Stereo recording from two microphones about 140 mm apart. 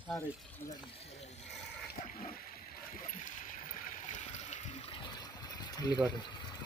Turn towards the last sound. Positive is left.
turn(degrees=30)  # may be behind; listen again after turning